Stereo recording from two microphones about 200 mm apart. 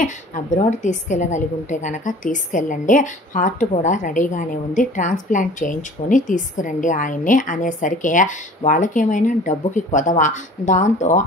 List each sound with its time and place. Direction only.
0.0 s a woman's voice: 40° left (ahead or behind)